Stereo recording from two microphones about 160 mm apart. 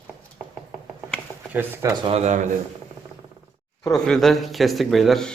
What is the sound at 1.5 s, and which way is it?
Speech, 10° right (ahead or behind).